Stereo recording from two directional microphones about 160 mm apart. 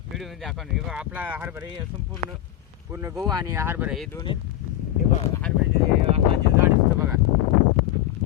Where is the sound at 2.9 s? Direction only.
20° right (ahead or behind).